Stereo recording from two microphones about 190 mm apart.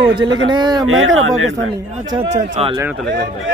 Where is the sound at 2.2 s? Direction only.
35° right (ahead or behind).